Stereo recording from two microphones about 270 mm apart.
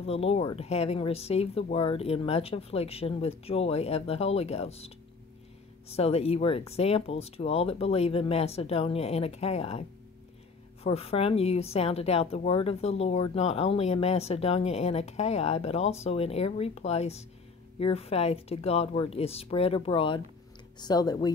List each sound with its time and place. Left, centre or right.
0.0 s a woman's voice: left